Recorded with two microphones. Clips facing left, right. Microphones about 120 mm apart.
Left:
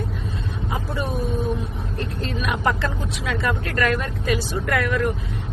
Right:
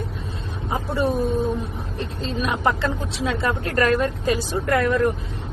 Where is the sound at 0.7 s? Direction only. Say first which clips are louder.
Right 6 dB; 30° right (ahead or behind).